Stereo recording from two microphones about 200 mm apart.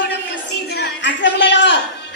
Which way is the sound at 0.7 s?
60° left (ahead or behind).